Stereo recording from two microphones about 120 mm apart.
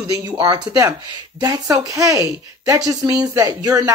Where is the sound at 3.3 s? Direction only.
30° right (ahead or behind).